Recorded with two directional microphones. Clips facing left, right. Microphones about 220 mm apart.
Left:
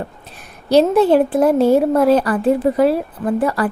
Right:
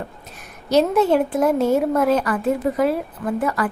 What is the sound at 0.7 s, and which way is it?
A woman's voice, 30° left (ahead or behind).